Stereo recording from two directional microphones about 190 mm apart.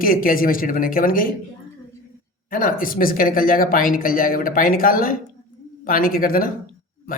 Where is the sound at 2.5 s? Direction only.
45° left (ahead or behind).